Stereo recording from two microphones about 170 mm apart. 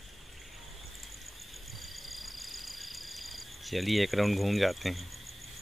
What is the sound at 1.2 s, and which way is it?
Cricket, centre (ahead or behind).